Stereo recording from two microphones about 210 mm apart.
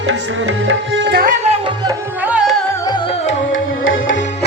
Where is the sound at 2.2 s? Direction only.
5° right (ahead or behind).